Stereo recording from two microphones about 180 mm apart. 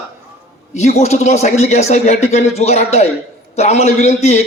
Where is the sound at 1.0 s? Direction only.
40° left (ahead or behind).